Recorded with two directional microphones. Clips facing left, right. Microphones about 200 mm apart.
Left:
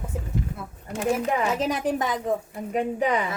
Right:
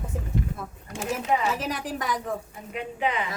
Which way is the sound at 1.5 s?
20° left (ahead or behind).